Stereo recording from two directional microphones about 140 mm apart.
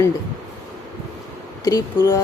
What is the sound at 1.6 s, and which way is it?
Speech, 20° left (ahead or behind).